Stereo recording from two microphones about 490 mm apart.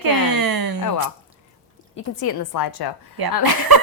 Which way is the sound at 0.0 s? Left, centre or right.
Right.